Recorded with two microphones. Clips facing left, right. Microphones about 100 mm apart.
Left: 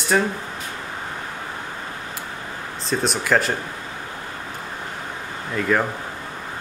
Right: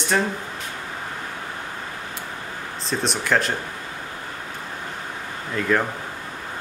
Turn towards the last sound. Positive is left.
turn(degrees=5)  # may be behind; listen again after turning